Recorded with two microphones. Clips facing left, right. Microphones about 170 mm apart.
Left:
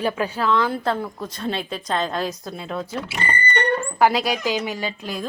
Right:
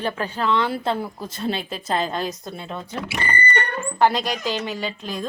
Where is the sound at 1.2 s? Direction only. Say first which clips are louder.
Left 1 dB; 25° right (ahead or behind).